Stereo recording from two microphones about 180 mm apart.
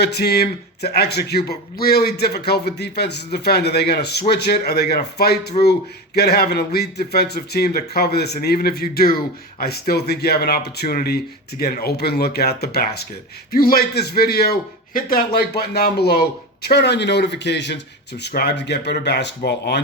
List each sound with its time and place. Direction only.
0.0 s a man's voice: 65° left (ahead or behind)